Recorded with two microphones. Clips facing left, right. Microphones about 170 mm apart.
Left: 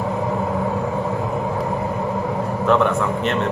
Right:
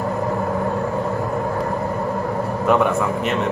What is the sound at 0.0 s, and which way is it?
Vehicle, 5° left (ahead or behind).